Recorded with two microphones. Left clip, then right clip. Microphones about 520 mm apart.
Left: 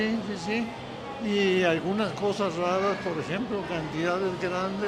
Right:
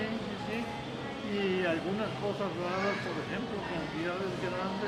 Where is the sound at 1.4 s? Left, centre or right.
Left.